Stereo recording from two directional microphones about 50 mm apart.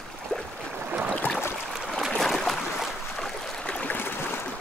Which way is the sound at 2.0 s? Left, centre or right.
Centre.